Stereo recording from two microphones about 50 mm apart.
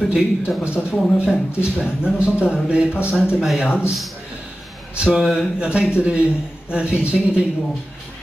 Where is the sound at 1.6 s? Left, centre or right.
Right.